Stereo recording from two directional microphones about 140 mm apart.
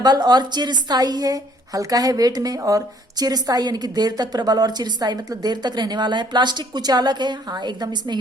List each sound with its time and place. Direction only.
0.0 s a woman's voice: 30° right (ahead or behind)